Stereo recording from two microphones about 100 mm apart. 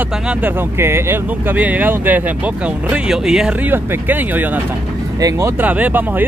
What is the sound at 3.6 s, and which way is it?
Speech, 20° right (ahead or behind).